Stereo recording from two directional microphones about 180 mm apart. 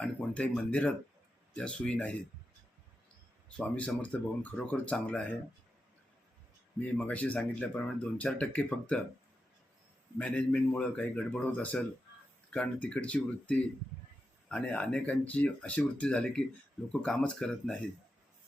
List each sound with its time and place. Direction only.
0.0 s speech: 5° left (ahead or behind)
3.6 s speech: 5° left (ahead or behind)
6.9 s speech: 5° left (ahead or behind)
10.2 s speech: 5° left (ahead or behind)